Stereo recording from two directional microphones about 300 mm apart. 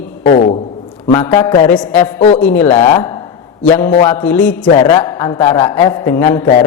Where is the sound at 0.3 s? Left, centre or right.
Left.